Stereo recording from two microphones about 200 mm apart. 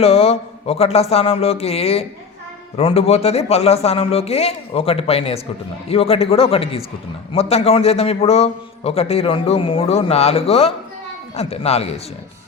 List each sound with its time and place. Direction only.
0.0 s a man's voice: 30° left (ahead or behind)